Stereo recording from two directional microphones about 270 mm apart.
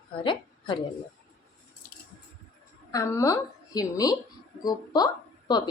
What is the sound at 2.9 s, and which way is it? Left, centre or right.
A woman's voice, centre.